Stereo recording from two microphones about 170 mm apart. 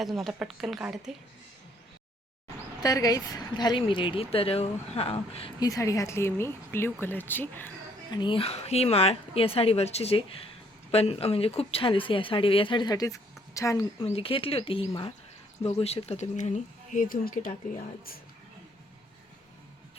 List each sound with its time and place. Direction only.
0.0 s speech: centre (ahead or behind)
2.8 s speech: 20° left (ahead or behind)
5.5 s speech: 20° left (ahead or behind)
8.1 s speech: 30° left (ahead or behind)
14.0 s speech: 35° left (ahead or behind); by 17.5 s 55° left (ahead or behind)